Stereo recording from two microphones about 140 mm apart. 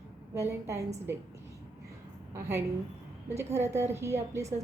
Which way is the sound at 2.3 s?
20° right (ahead or behind).